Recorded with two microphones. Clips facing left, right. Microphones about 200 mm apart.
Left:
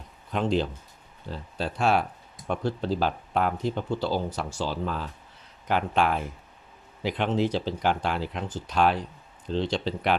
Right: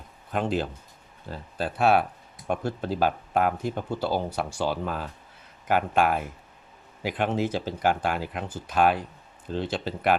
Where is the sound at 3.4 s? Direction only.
10° right (ahead or behind).